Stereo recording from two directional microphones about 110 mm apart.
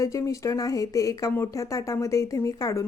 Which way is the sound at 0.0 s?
30° left (ahead or behind).